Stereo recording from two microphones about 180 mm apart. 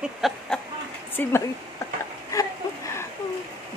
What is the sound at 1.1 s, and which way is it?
Speech, 10° left (ahead or behind).